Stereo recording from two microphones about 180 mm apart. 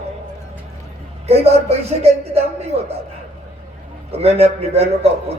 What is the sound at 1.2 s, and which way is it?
A man's voice, 35° right (ahead or behind).